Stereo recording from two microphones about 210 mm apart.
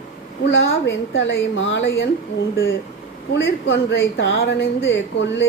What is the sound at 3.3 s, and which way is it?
A woman's voice, 55° left (ahead or behind).